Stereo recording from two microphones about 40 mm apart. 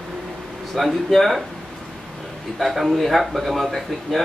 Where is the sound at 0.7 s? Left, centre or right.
Centre.